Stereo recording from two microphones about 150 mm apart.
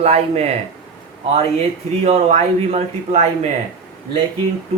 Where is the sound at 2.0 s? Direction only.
45° right (ahead or behind).